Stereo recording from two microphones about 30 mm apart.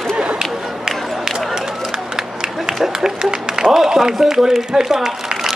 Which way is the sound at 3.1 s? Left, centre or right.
Right.